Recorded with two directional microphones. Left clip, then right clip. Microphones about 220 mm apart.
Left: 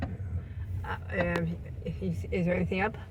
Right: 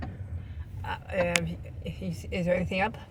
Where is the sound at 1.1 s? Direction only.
30° right (ahead or behind).